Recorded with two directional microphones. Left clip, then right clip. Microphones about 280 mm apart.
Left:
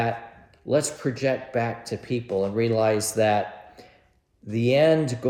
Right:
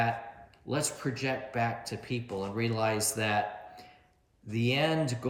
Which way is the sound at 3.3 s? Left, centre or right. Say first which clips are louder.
Left 5 dB; centre.